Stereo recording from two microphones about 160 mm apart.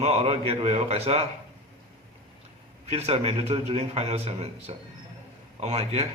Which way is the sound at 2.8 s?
40° right (ahead or behind).